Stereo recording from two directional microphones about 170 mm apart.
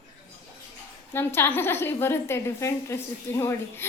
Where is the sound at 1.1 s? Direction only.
15° left (ahead or behind).